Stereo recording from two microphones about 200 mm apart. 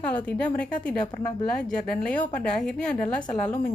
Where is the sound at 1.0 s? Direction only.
20° left (ahead or behind).